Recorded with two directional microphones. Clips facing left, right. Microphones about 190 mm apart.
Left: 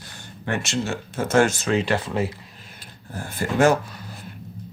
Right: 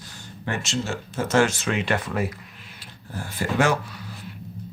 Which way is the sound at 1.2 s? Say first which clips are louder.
Left 2 dB; 50° left (ahead or behind).